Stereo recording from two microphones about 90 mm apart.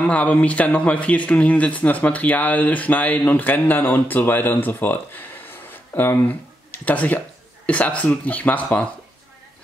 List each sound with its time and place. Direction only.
0.0 s speech: 15° left (ahead or behind)